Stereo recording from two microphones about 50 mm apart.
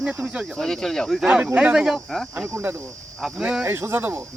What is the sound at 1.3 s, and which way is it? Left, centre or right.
Speech, centre.